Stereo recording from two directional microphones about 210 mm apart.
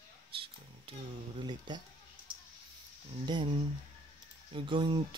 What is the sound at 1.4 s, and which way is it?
Speech, 20° right (ahead or behind).